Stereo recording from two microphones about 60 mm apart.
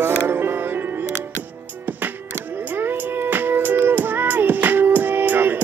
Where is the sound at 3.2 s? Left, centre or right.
Right.